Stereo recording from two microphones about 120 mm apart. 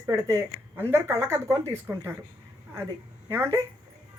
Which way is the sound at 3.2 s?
20° right (ahead or behind).